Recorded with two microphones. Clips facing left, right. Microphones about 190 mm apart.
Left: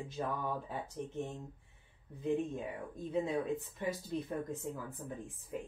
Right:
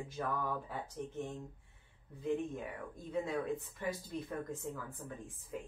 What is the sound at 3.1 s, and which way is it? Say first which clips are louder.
Speech: left 2 dB; 20° left (ahead or behind).